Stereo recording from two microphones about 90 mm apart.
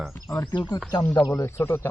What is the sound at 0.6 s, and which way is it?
Speech, 50° left (ahead or behind).